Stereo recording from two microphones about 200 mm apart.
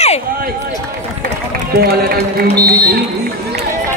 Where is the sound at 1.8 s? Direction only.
50° right (ahead or behind).